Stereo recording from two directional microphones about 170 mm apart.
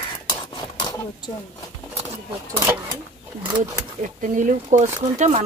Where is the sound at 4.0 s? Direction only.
50° right (ahead or behind).